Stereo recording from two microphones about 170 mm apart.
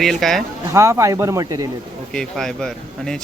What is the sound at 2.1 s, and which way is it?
Speech, 5° left (ahead or behind).